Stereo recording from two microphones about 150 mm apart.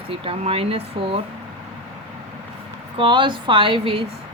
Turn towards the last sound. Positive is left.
turn(degrees=-35)  # may be behind; listen again after turning